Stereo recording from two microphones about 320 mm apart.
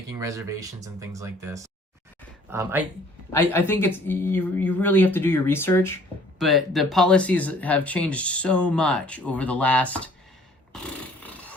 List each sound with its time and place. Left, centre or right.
0.1 s speech: centre
3.3 s speech: centre
10.7 s roar: centre